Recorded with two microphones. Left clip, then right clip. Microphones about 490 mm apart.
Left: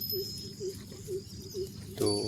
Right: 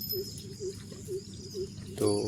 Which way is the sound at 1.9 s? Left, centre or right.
Left.